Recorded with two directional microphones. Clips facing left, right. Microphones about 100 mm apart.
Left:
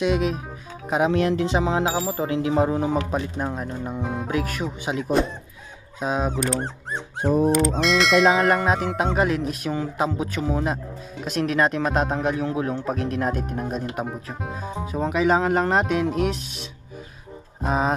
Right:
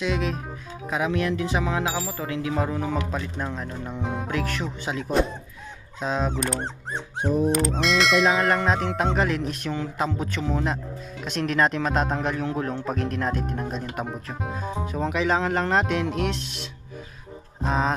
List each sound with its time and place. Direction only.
0.0 s speech: 15° left (ahead or behind)
0.8 s speech: 25° left (ahead or behind)
4.0 s speech: centre (ahead or behind)
7.2 s speech: 40° left (ahead or behind)
7.8 s bell: centre (ahead or behind)
17.6 s speech: 10° left (ahead or behind)